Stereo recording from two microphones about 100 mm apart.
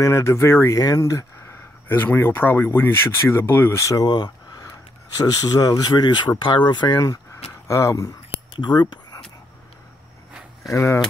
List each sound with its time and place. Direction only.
0.0 s speech: 30° left (ahead or behind)
1.9 s speech: 20° left (ahead or behind); by 7.0 s 50° left (ahead or behind)
7.6 s speech: 30° left (ahead or behind)
8.5 s speech: 45° left (ahead or behind)
10.7 s speech: 30° left (ahead or behind)